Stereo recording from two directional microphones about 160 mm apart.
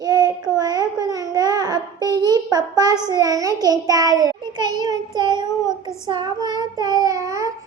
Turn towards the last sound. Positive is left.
turn(degrees=-20)  # may be behind; listen again after turning